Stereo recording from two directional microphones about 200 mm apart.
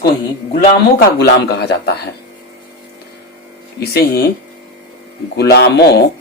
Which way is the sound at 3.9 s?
55° left (ahead or behind).